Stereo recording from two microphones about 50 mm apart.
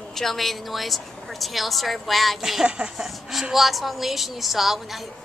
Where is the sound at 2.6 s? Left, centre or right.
Centre.